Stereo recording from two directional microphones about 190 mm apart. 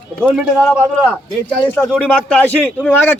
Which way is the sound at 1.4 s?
10° left (ahead or behind).